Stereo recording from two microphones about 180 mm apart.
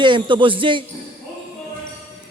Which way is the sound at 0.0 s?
25° right (ahead or behind).